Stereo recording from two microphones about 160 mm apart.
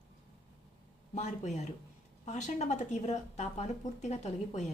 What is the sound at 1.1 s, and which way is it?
A woman's voice, 45° left (ahead or behind).